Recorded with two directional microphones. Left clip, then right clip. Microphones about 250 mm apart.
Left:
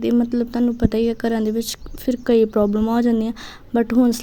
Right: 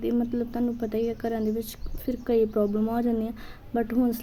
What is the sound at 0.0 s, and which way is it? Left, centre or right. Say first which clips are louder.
Speech: left 8 dB; left.